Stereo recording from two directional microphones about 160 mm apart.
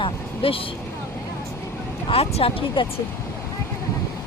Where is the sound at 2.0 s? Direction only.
40° left (ahead or behind).